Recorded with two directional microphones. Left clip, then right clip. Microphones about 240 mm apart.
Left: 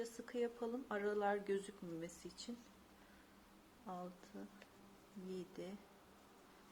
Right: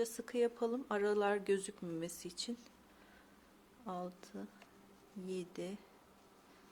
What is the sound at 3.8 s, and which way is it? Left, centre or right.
Speech, right.